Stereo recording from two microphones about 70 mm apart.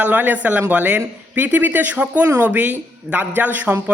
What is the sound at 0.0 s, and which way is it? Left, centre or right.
A man's voice, right.